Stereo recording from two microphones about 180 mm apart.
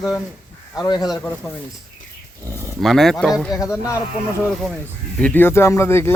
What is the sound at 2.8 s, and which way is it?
Speech, centre (ahead or behind).